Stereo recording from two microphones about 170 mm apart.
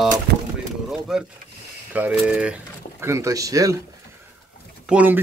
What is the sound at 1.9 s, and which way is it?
Speech, 10° right (ahead or behind).